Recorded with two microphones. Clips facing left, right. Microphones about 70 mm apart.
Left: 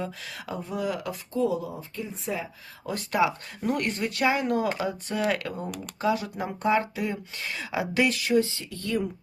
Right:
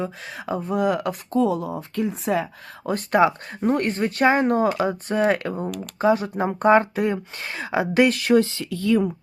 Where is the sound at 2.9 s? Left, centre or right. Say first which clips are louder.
Right 6 dB; right.